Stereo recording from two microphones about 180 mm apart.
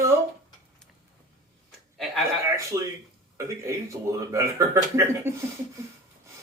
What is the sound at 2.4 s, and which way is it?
Speech, 15° right (ahead or behind).